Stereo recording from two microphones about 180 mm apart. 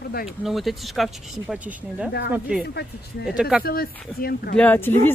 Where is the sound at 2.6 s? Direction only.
65° left (ahead or behind).